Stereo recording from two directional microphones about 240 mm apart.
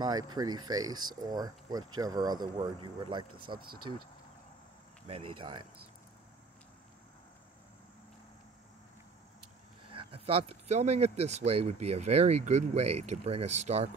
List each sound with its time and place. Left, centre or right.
0.0 s speech: centre
5.4 s speech: centre
9.8 s speech: right